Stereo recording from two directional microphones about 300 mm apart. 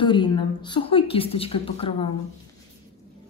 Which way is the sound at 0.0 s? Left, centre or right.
Centre.